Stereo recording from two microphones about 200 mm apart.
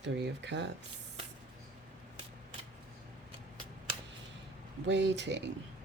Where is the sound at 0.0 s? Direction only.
60° right (ahead or behind).